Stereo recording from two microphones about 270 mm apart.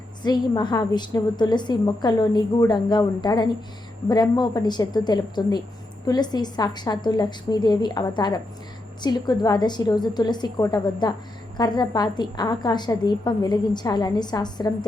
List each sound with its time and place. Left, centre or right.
0.2 s a woman's voice: centre